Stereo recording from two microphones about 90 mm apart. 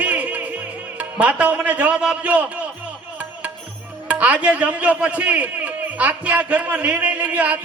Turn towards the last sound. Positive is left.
turn(degrees=-15)  # may be behind; listen again after turning